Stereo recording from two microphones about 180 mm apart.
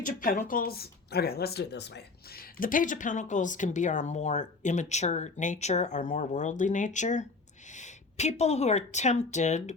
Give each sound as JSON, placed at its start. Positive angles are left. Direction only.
{"t": 0.0, "sound": "a woman's voice", "side_deg": 50}